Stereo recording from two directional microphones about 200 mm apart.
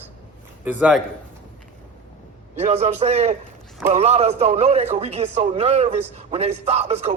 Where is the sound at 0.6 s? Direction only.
5° right (ahead or behind).